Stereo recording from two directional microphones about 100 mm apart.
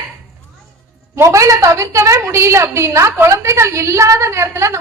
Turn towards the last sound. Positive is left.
turn(degrees=-30)  # may be behind; listen again after turning